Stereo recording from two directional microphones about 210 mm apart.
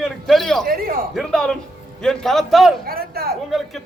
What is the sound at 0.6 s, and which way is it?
Speech, 45° right (ahead or behind).